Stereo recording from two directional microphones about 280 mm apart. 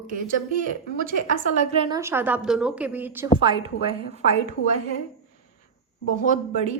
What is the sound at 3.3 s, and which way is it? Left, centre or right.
Speech, centre.